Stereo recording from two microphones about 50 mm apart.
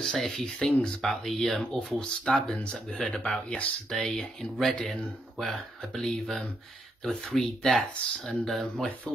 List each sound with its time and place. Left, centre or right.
0.0 s speech: centre
1.7 s speech: centre
3.9 s speech: centre